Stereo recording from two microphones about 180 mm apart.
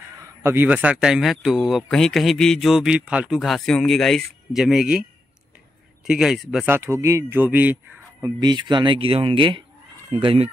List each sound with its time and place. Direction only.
0.2 s speech: 15° right (ahead or behind)
6.0 s speech: 5° right (ahead or behind)
8.4 s speech: 25° right (ahead or behind)